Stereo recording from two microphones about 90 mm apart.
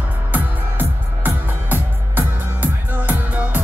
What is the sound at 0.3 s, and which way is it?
Music, 20° right (ahead or behind).